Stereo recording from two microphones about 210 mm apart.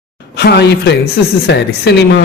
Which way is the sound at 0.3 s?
50° left (ahead or behind).